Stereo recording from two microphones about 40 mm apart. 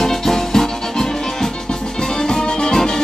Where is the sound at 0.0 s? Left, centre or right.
Centre.